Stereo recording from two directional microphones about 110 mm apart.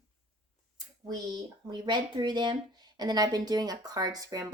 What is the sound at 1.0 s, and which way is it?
Speech, 40° right (ahead or behind).